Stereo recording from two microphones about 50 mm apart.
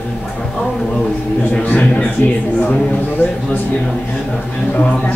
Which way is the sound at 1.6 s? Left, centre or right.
Left.